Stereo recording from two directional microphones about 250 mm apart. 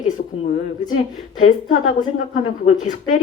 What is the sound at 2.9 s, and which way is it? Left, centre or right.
Speech, left.